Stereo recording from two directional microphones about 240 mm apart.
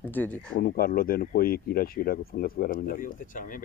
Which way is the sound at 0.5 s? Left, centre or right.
Left.